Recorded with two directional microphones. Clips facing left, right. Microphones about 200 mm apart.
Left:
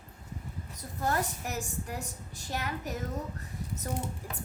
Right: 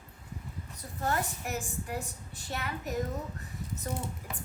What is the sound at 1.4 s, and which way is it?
A woman's voice, 40° left (ahead or behind).